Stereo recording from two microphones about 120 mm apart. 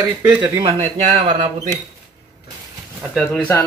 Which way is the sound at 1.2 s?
40° right (ahead or behind).